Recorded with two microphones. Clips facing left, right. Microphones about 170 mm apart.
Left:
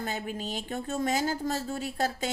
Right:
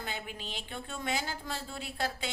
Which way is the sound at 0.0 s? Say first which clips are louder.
Left 7 dB; 45° left (ahead or behind).